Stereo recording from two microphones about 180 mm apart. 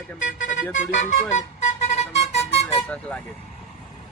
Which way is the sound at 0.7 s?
45° left (ahead or behind).